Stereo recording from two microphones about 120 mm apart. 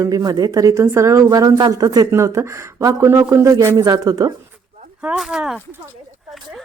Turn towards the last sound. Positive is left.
turn(degrees=-5)  # may be behind; listen again after turning